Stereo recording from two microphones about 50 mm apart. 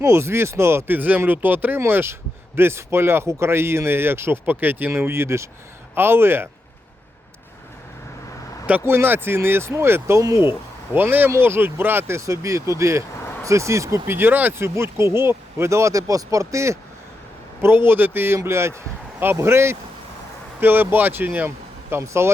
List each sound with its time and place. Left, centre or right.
0.0 s speech: right
0.9 s speech: right
4.9 s speech: right
5.9 s speech: right
8.8 s speech: right
10.9 s speech: right
11.3 s speech: right
12.1 s speech: right
14.1 s speech: right
14.6 s speech: right
17.6 s speech: right
20.6 s speech: right
22.0 s speech: right